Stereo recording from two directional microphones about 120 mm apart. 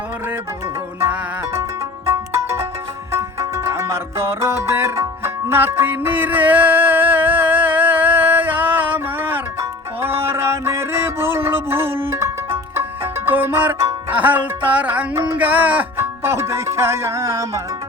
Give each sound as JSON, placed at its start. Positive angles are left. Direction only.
{"t": 2.0, "sound": "music", "side_deg": -25}